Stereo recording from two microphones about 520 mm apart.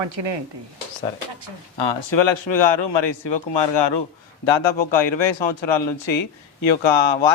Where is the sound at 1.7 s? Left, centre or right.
Left.